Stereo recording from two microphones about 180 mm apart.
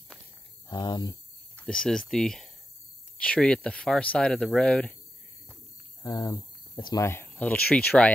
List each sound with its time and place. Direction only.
0.7 s cricket: 25° left (ahead or behind)
1.6 s speech: 5° left (ahead or behind)
6.0 s speech: 20° left (ahead or behind)